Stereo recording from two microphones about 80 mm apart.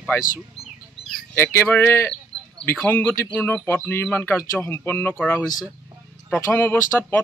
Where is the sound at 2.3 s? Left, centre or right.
Right.